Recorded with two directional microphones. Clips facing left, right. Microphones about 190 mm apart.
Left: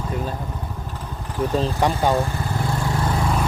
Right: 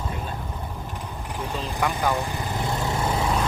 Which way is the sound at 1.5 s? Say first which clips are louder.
Left 6 dB; 35° left (ahead or behind).